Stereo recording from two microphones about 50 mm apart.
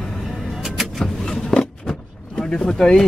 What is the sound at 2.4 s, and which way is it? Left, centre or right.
Speech, centre.